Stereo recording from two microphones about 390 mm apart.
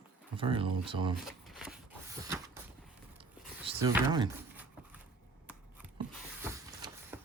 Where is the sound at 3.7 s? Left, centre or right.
Centre.